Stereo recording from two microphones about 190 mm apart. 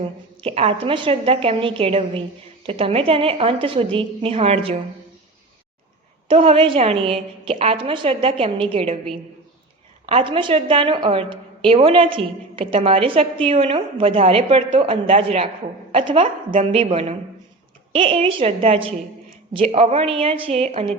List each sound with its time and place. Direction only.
0.4 s a woman's voice: 30° right (ahead or behind)
6.2 s a woman's voice: 30° right (ahead or behind)
10.1 s a woman's voice: 30° right (ahead or behind)